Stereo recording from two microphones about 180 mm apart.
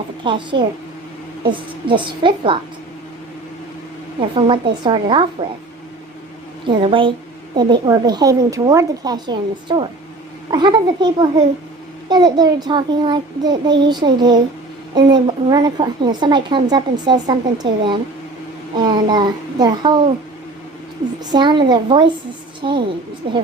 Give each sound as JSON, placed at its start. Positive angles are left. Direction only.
{"t": 0.3, "sound": "a woman's voice", "side_deg": -25}
{"t": 4.2, "sound": "a woman's voice", "side_deg": -30}
{"t": 6.7, "sound": "a woman's voice", "side_deg": -30}
{"t": 21.2, "sound": "a woman's voice", "side_deg": -25}